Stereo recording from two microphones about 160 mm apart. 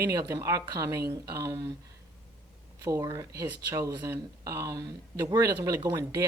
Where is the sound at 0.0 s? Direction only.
20° right (ahead or behind).